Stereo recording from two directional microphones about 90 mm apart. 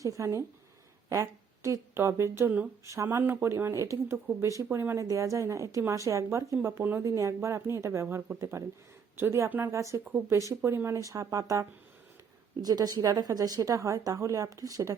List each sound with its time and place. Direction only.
0.0 s a woman's voice: 35° right (ahead or behind)
12.6 s a woman's voice: 45° right (ahead or behind)